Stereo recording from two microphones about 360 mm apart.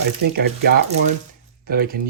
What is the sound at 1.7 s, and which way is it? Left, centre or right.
Speech, right.